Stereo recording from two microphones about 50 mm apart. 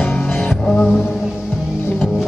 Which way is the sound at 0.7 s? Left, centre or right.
Centre.